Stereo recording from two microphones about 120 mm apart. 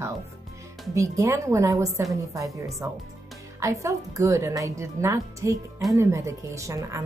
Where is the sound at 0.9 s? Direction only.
25° right (ahead or behind).